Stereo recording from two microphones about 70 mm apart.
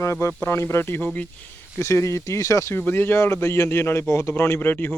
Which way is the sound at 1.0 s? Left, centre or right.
Left.